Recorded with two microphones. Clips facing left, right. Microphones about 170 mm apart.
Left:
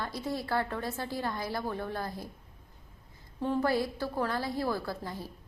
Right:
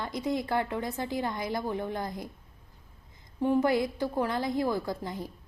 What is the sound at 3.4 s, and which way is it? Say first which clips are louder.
A woman's voice: right 4 dB; 15° right (ahead or behind).